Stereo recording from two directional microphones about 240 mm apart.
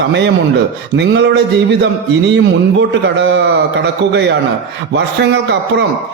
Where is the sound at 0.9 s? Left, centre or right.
Right.